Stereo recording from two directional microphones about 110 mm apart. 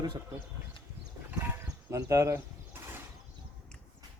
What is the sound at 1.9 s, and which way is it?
Speech, 25° right (ahead or behind).